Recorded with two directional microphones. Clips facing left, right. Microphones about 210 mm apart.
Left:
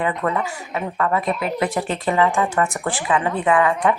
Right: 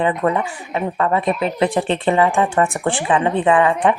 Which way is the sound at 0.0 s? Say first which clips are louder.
Right 4 dB; 25° right (ahead or behind).